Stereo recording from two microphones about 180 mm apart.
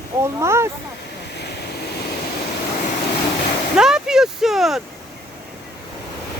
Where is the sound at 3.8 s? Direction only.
5° right (ahead or behind).